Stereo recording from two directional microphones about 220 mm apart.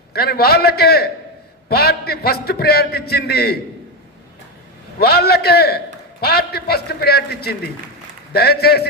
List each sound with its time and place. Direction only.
0.1 s a man's voice: 45° left (ahead or behind)
4.9 s a man's voice: 45° left (ahead or behind)